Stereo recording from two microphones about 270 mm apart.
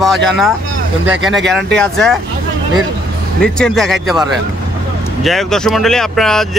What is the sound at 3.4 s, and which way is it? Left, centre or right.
Speech, centre.